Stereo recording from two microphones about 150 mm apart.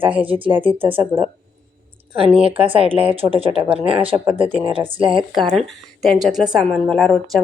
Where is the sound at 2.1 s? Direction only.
40° right (ahead or behind).